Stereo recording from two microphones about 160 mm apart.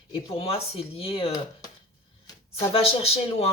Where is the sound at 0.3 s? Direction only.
35° left (ahead or behind).